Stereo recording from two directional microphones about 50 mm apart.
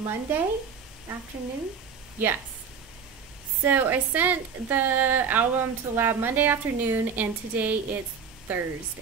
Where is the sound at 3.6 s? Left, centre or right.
Right.